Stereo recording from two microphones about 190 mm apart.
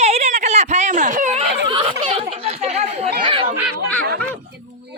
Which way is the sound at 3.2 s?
30° right (ahead or behind).